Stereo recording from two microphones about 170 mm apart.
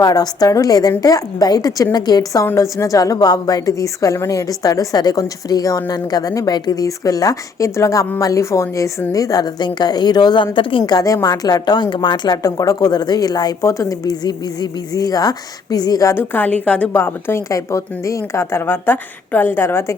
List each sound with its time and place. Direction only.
0.0 s a woman's voice: 20° left (ahead or behind)